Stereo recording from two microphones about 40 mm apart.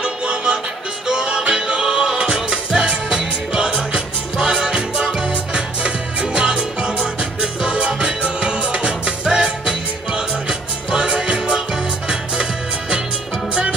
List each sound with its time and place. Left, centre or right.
0.0 s music: right